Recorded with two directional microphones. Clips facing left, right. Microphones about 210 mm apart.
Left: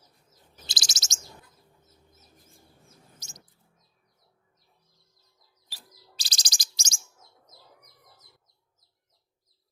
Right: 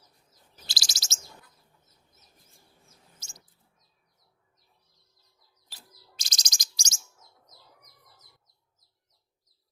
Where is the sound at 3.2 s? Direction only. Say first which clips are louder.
Left 3 dB; 20° left (ahead or behind).